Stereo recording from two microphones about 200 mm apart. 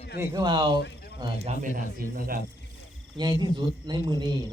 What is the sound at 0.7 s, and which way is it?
Speech, 55° left (ahead or behind).